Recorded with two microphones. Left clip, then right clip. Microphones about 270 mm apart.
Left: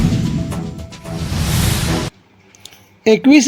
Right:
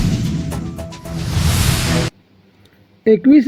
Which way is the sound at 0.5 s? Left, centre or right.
Centre.